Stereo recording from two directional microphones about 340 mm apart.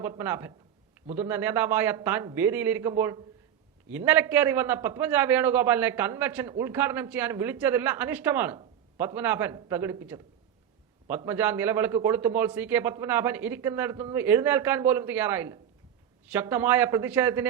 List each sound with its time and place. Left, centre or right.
0.0 s a man's voice: centre